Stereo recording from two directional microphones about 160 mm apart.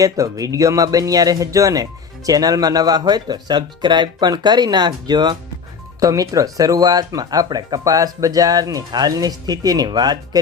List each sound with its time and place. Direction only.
0.0 s speech: 20° right (ahead or behind)